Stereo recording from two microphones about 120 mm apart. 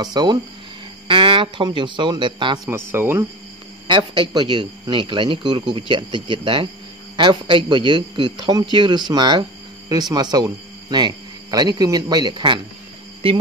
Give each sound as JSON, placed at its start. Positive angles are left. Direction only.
{"t": 0.0, "sound": "speech", "side_deg": -35}
{"t": 2.7, "sound": "speech", "side_deg": -20}
{"t": 3.8, "sound": "speech", "side_deg": -40}